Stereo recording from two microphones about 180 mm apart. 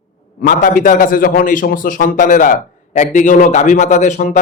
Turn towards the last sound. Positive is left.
turn(degrees=40)  # may be behind; listen again after turning